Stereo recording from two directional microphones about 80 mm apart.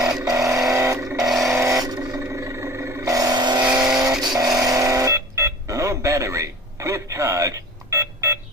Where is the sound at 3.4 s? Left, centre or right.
Right.